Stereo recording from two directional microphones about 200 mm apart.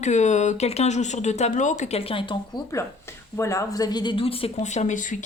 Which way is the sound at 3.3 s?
15° left (ahead or behind).